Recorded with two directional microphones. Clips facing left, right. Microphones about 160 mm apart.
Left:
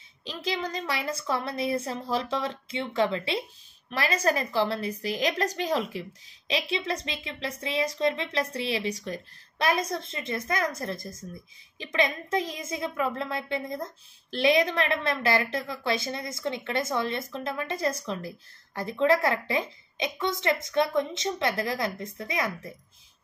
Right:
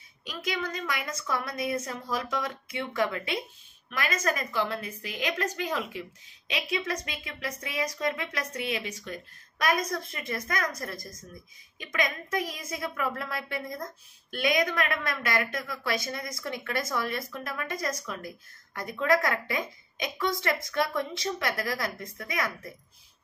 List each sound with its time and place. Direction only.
0.2 s a child's voice: 30° left (ahead or behind)